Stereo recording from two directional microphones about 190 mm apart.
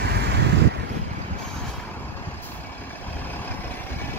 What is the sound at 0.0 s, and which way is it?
Boat, 65° right (ahead or behind).